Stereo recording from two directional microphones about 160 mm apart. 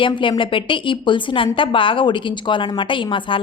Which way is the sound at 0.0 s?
30° left (ahead or behind).